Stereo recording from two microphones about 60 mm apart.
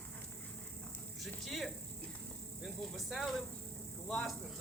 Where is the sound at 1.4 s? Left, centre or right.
Centre.